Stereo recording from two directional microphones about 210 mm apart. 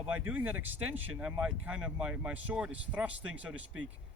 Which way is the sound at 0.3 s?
10° right (ahead or behind).